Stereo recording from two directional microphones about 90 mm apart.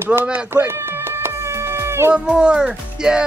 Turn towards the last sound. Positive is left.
turn(degrees=-10)  # may be behind; listen again after turning